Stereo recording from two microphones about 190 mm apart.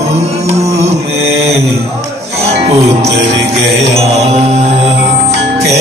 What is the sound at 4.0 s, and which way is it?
Mantra, 35° right (ahead or behind).